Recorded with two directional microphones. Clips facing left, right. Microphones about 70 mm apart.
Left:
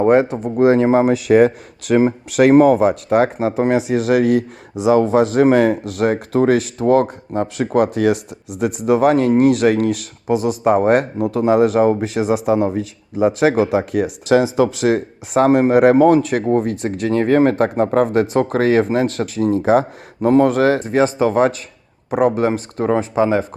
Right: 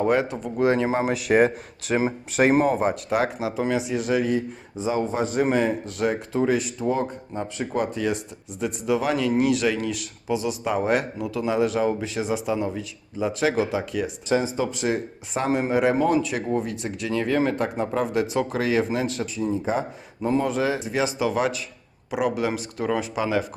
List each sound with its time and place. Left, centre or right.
0.0 s speech: left
20.2 s speech: left